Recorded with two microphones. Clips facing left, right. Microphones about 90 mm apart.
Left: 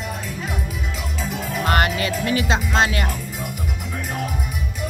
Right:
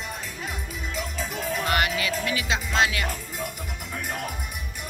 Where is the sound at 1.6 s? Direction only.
40° left (ahead or behind).